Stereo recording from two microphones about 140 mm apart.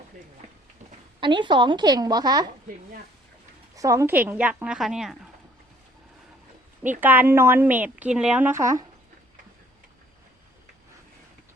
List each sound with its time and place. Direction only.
1.2 s a woman's voice: 35° right (ahead or behind)
3.8 s a woman's voice: 25° right (ahead or behind); by 5.1 s centre (ahead or behind)
7.0 s a woman's voice: 15° right (ahead or behind)